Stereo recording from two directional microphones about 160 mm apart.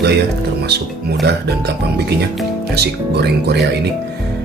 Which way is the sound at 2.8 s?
90° right.